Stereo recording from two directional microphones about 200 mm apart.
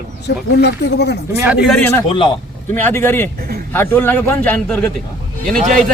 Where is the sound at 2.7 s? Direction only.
10° left (ahead or behind).